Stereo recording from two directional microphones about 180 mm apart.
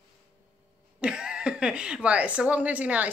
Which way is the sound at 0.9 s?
5° right (ahead or behind).